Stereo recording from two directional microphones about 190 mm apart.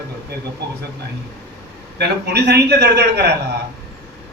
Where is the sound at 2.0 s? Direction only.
60° right (ahead or behind).